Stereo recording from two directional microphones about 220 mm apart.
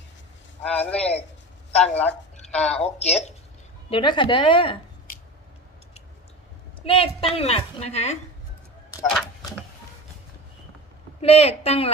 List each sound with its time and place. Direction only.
0.6 s a woman's voice: 5° left (ahead or behind)
2.7 s a woman's voice: 30° left (ahead or behind)
5.1 s scissors: 40° left (ahead or behind)
6.8 s a woman's voice: 25° left (ahead or behind)
11.2 s a woman's voice: 30° left (ahead or behind)